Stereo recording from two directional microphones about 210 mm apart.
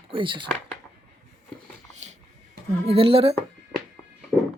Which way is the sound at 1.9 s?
35° right (ahead or behind).